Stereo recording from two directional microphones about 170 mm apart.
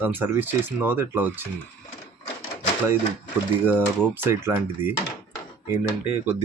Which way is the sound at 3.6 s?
15° right (ahead or behind).